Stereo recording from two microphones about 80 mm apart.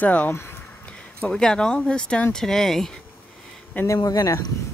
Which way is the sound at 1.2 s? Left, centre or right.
Centre.